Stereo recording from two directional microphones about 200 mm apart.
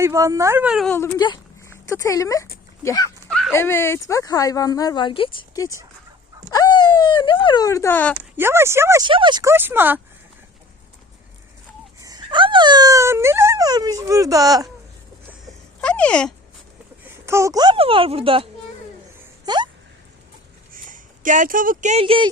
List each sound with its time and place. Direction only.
0.0 s speech: 15° right (ahead or behind)
0.9 s speech: 20° left (ahead or behind)
3.2 s dog: centre (ahead or behind)
3.5 s speech: 10° left (ahead or behind)
6.5 s a sound: 20° left (ahead or behind)
8.4 s speech: 10° right (ahead or behind)
11.9 s speech: 20° right (ahead or behind)
15.8 s a sound: 5° left (ahead or behind)
17.2 s speech: 15° right (ahead or behind)
19.5 s speech: 20° right (ahead or behind)
20.7 s speech: 40° right (ahead or behind)